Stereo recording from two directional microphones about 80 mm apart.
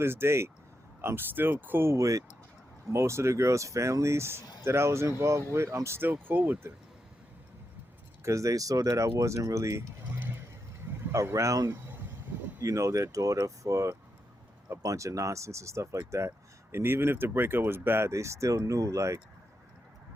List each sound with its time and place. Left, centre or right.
0.0 s speech: right
8.2 s speech: right
10.2 s vehicle: right
10.8 s a sound: right
12.6 s speech: right